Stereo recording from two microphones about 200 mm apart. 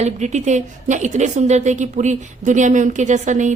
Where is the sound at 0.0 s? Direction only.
35° right (ahead or behind).